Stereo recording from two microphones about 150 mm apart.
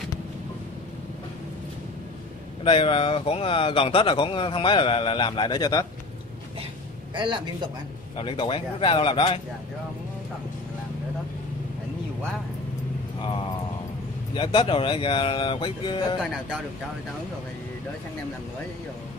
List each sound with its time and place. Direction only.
2.6 s speech: 35° left (ahead or behind)
8.2 s speech: 35° left (ahead or behind)
14.3 s speech: 35° left (ahead or behind)